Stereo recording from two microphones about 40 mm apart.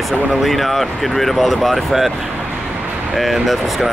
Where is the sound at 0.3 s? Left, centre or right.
Centre.